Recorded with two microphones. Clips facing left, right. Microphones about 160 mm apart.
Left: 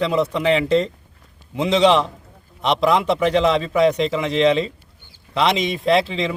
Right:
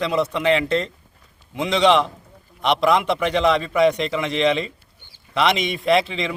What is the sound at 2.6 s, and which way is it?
Speech, centre (ahead or behind).